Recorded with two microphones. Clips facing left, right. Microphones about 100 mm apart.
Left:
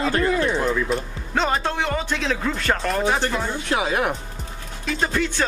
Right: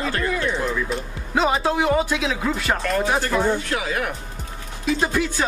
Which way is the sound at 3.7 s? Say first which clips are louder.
Left 3 dB; 25° left (ahead or behind).